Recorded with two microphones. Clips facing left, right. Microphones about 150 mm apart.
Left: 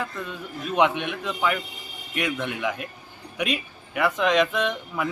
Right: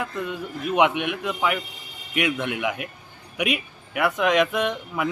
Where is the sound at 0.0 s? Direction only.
10° right (ahead or behind).